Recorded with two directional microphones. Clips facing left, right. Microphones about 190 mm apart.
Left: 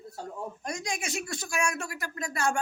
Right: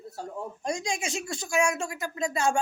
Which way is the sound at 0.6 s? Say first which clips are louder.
Right 5 dB; 25° right (ahead or behind).